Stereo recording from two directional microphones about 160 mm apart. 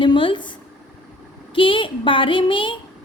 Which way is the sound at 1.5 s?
30° left (ahead or behind).